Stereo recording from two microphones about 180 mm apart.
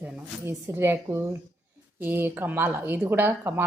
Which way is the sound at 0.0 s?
15° right (ahead or behind).